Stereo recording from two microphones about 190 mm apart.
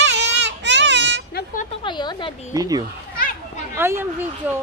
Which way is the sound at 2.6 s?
20° right (ahead or behind).